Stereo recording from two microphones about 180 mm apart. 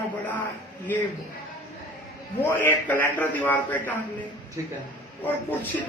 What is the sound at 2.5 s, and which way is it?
A man's voice, 10° left (ahead or behind).